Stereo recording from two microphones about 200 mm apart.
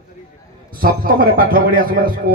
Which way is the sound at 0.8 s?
45° right (ahead or behind).